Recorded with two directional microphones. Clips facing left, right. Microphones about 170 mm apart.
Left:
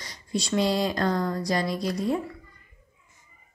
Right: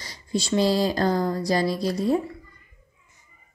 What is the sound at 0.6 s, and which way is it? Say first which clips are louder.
Speech: right 3 dB; 35° right (ahead or behind).